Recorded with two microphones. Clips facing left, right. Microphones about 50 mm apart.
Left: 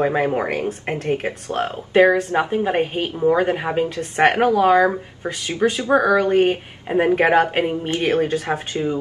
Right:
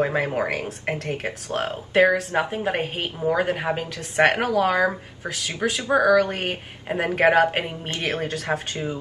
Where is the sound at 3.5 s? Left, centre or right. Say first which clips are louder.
Left 3 dB; centre.